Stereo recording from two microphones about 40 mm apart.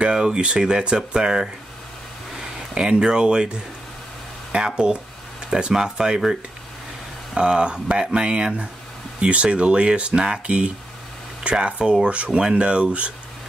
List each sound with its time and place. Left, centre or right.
0.0 s speech: right
7.3 s speech: right